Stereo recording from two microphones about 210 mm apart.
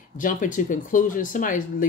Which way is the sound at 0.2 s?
40° left (ahead or behind).